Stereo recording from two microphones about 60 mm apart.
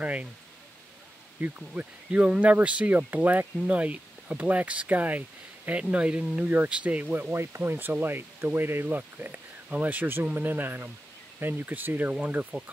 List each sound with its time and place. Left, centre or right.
0.0 s speech: right
1.4 s speech: right
7.3 s speech: right